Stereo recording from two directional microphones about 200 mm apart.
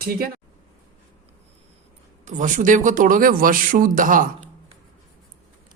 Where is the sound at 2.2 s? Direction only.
40° right (ahead or behind).